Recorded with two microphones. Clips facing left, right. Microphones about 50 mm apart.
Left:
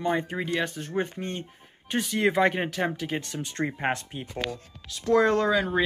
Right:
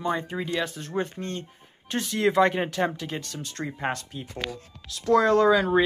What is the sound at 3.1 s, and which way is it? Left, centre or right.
Speech, left.